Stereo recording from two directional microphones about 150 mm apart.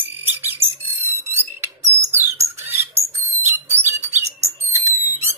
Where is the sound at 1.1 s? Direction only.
15° right (ahead or behind).